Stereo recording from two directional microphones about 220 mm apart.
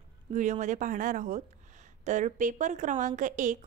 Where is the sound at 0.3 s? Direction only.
35° right (ahead or behind).